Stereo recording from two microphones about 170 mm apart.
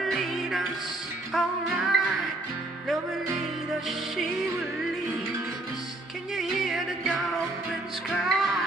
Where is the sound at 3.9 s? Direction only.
Centre (ahead or behind).